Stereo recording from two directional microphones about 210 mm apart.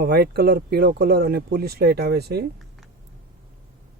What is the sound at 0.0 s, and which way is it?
Speech, 50° right (ahead or behind).